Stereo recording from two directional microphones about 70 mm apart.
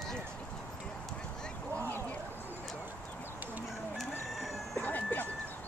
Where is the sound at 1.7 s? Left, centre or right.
Left.